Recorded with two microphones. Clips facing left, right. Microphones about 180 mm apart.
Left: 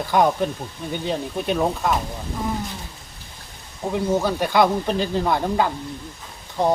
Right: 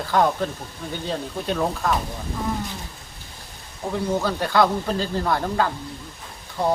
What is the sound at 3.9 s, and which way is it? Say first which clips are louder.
Speech: left 2 dB; 15° left (ahead or behind).